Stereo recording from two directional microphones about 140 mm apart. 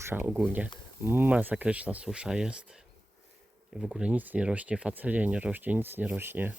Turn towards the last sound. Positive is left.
turn(degrees=-15)  # may be behind; listen again after turning